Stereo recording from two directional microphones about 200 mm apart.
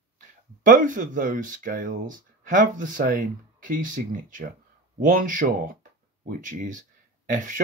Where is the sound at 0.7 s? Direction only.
40° right (ahead or behind).